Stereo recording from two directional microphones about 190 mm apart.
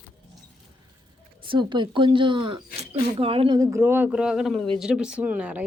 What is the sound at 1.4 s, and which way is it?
Speech, 25° right (ahead or behind).